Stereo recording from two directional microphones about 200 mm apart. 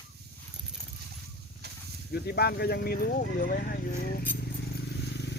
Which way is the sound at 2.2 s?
50° left (ahead or behind).